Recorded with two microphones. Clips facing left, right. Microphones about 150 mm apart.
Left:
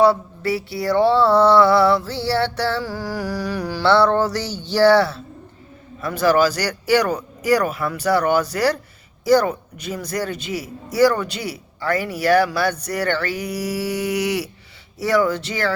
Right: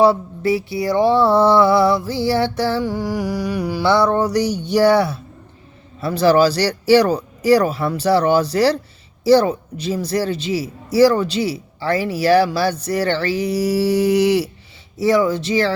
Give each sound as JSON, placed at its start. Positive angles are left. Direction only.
{"t": 0.0, "sound": "mantra", "side_deg": -20}
{"t": 6.0, "sound": "a man's voice", "side_deg": -30}